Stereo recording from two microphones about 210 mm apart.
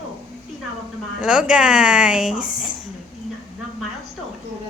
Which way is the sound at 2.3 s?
40° left (ahead or behind).